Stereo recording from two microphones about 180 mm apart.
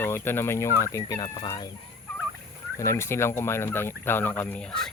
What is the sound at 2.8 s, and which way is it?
Speech, 15° left (ahead or behind).